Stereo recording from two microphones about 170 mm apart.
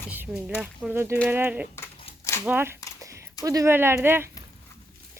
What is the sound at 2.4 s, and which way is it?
Speech, 10° right (ahead or behind).